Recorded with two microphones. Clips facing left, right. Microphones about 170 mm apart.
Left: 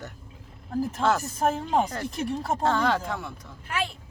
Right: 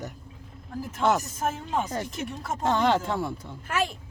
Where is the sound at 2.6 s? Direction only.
20° right (ahead or behind).